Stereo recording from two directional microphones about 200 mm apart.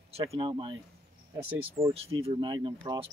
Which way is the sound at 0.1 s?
30° right (ahead or behind).